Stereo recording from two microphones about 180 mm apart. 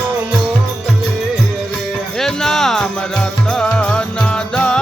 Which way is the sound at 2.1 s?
5° left (ahead or behind).